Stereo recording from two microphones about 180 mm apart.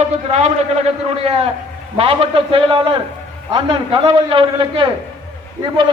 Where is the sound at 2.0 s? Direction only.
30° right (ahead or behind).